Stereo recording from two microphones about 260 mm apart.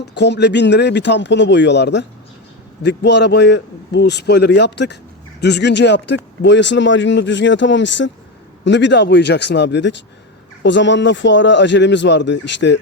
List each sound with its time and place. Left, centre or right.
0.1 s a man's voice: left